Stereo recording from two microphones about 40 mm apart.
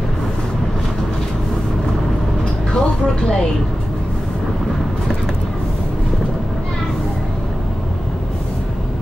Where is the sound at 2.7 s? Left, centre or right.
Centre.